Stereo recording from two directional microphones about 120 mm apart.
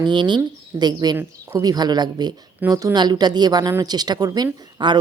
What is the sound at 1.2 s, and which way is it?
Speech, 20° right (ahead or behind).